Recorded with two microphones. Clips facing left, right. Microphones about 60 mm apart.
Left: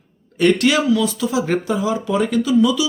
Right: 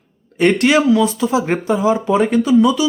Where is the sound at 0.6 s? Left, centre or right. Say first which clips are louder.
Right 4 dB; right.